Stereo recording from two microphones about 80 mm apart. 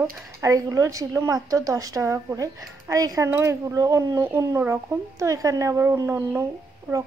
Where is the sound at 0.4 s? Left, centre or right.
Right.